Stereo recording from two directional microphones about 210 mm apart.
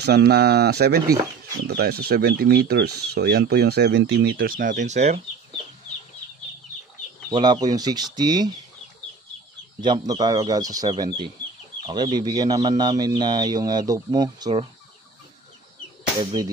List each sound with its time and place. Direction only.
0.0 s speech: 50° right (ahead or behind); by 5.2 s 30° right (ahead or behind)
7.2 s speech: 20° right (ahead or behind)
9.8 s speech: 20° right (ahead or behind)